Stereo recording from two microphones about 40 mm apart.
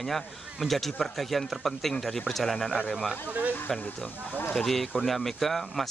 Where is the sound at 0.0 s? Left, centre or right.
Centre.